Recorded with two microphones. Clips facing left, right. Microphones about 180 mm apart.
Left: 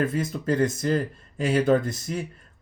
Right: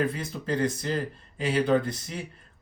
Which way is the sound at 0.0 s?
45° left (ahead or behind).